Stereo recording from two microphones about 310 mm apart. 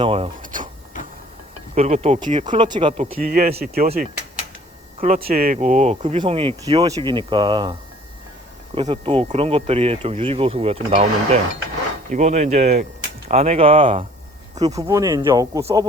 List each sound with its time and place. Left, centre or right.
0.0 s speech: centre
1.7 s speech: right
3.2 s speech: right